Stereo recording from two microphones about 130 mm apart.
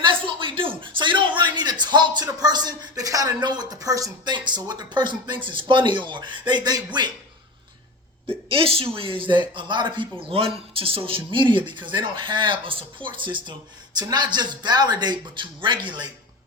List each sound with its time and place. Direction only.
0.0 s speech: 40° right (ahead or behind)
8.3 s speech: 45° right (ahead or behind)